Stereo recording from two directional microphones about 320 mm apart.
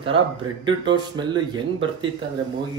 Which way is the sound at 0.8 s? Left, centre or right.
Centre.